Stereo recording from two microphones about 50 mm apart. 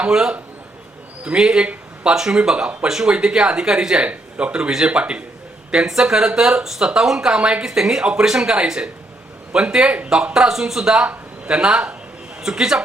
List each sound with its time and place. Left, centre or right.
0.1 s a man's voice: centre
10.3 s speech: centre
11.0 s a man's voice: right